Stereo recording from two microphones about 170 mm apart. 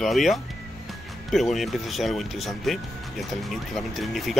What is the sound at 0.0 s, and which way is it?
Speech, centre (ahead or behind).